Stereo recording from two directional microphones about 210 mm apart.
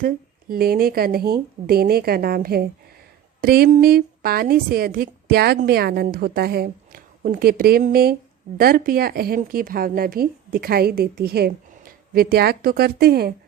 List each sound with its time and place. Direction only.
0.0 s a woman's voice: 45° right (ahead or behind)